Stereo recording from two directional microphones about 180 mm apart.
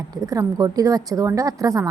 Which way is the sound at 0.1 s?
20° right (ahead or behind).